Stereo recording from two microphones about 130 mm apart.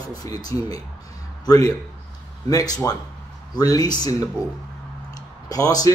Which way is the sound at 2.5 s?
30° left (ahead or behind).